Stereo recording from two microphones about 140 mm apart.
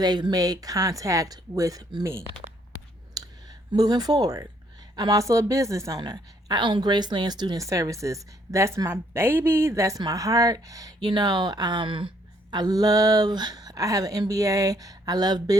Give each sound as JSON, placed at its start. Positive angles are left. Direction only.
{"t": 0.0, "sound": "speech", "side_deg": -30}